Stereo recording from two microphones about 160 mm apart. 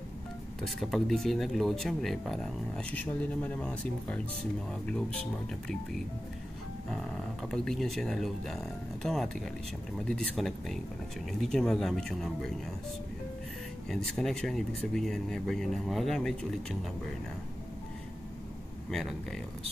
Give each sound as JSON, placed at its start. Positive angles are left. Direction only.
{"t": 0.6, "sound": "speech", "side_deg": 0}
{"t": 6.9, "sound": "speech", "side_deg": 5}
{"t": 13.8, "sound": "speech", "side_deg": 5}
{"t": 18.9, "sound": "speech", "side_deg": 0}